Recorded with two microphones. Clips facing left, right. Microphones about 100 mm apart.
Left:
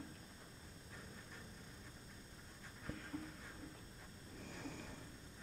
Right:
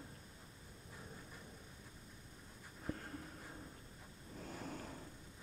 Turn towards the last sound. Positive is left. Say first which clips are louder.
# right 3 dB
turn(degrees=-40)  # may be behind; listen again after turning